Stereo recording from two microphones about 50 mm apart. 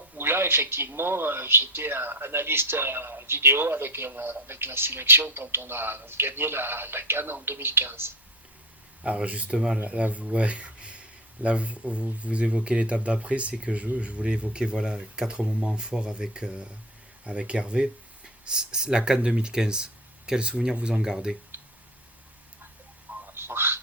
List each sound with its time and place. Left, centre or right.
0.2 s speech: right
9.0 s speech: right
23.2 s a sound: right